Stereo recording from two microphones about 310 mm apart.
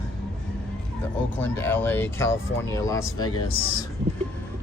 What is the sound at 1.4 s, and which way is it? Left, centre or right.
Speech, centre.